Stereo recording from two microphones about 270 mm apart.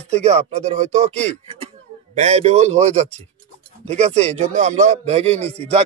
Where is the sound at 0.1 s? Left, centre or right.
Right.